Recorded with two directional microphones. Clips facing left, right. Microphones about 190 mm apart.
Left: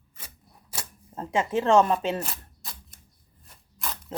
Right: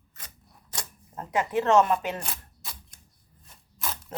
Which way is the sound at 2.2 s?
Centre (ahead or behind).